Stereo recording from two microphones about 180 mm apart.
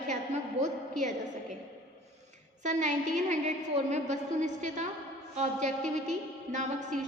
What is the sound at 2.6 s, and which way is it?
A woman's voice, 40° right (ahead or behind).